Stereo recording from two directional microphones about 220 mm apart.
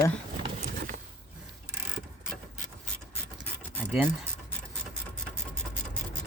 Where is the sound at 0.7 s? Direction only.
45° right (ahead or behind).